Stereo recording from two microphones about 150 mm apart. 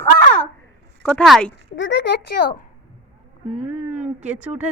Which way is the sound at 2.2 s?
90° left.